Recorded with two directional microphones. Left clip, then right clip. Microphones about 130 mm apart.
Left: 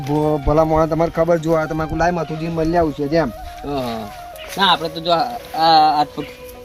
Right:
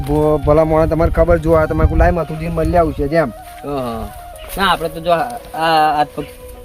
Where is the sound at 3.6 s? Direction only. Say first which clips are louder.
Right 2 dB; centre (ahead or behind).